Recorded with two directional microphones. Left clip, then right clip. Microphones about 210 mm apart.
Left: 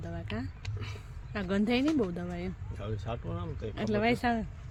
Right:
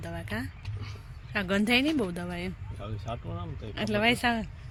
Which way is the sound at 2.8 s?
10° left (ahead or behind).